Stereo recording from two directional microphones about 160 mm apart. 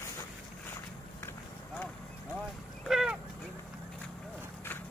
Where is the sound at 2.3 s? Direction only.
Centre (ahead or behind).